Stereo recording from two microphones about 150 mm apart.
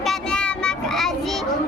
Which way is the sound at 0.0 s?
5° left (ahead or behind).